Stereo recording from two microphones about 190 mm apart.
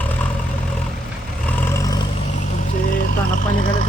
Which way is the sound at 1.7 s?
20° left (ahead or behind).